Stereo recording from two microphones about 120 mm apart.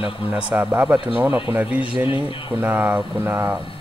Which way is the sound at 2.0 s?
45° left (ahead or behind).